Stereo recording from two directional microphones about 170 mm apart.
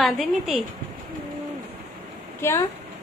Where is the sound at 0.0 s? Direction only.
Centre (ahead or behind).